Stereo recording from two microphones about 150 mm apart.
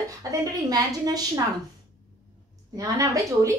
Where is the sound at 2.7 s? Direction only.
25° right (ahead or behind).